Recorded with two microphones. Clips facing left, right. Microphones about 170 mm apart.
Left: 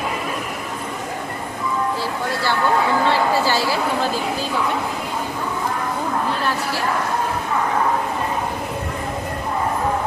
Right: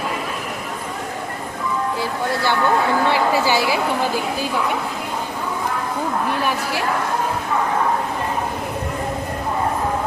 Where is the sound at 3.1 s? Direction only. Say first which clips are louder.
Right 1 dB; 15° right (ahead or behind).